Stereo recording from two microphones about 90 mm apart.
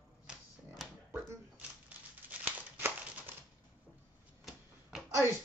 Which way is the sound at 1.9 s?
15° right (ahead or behind).